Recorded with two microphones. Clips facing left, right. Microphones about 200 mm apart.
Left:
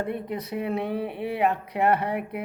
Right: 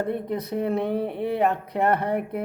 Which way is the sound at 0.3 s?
45° right (ahead or behind).